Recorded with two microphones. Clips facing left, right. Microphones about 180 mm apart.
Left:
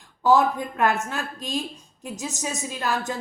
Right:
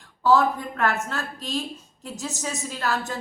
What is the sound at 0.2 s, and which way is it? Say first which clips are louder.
Speech: left 1 dB; 20° left (ahead or behind).